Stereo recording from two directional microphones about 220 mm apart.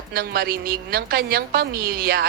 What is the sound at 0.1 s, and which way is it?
A woman's voice, 45° right (ahead or behind).